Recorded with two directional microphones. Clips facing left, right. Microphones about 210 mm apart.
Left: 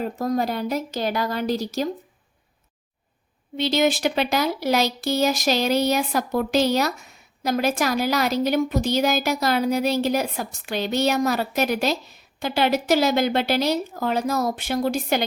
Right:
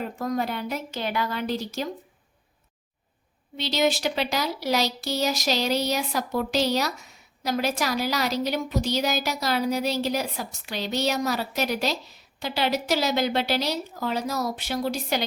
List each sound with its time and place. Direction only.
0.0 s speech: 40° left (ahead or behind)
3.6 s a woman's voice: 55° left (ahead or behind)